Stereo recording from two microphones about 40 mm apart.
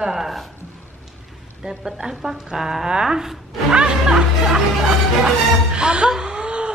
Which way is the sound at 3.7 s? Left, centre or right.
Right.